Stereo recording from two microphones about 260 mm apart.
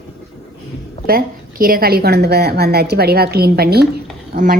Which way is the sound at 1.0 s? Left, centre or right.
Right.